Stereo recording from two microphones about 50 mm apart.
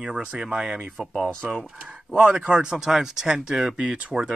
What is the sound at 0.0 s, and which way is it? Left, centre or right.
Speech, right.